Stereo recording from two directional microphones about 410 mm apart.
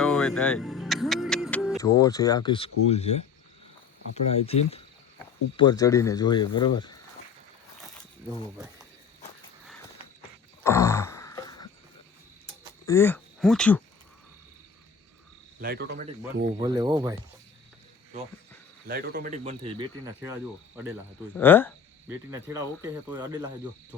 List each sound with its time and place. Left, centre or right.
0.0 s music: centre
2.0 s speech: centre
7.9 s a sound: centre
10.6 s a sound: centre
12.8 s speech: centre
15.6 s speech: right; by 17.2 s centre
18.9 s speech: right
21.3 s speech: centre
22.4 s speech: centre